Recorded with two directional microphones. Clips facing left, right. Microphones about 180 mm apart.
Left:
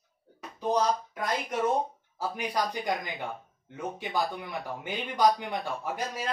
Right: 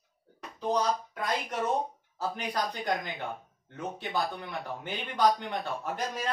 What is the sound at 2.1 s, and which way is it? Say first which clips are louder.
Speech: left 2 dB; 10° left (ahead or behind).